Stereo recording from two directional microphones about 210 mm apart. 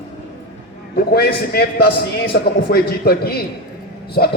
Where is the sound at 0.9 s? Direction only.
50° left (ahead or behind).